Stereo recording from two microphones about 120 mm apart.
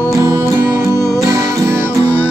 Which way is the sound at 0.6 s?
25° right (ahead or behind).